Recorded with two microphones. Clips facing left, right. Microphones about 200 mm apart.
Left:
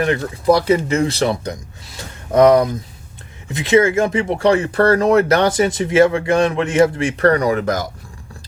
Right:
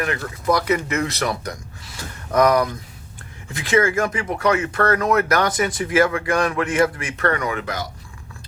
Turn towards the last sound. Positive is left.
turn(degrees=40)  # may be behind; listen again after turning